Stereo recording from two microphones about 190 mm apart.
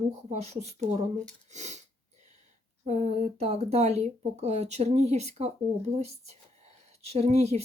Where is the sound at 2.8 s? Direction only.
35° right (ahead or behind).